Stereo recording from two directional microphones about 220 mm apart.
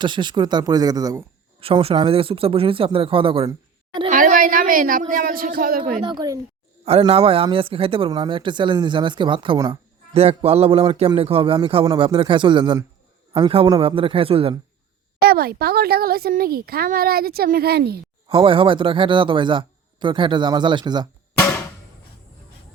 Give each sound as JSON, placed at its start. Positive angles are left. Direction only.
{"t": 0.0, "sound": "speech", "side_deg": -20}
{"t": 4.1, "sound": "a woman's voice", "side_deg": -40}
{"t": 6.1, "sound": "a woman's voice", "side_deg": -15}
{"t": 15.2, "sound": "speech", "side_deg": -45}
{"t": 18.3, "sound": "speech", "side_deg": -25}
{"t": 21.3, "sound": "music", "side_deg": 10}